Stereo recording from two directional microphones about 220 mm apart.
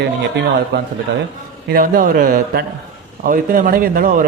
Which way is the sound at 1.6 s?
40° right (ahead or behind).